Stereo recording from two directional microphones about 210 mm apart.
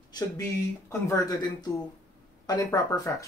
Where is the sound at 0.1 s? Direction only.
15° left (ahead or behind).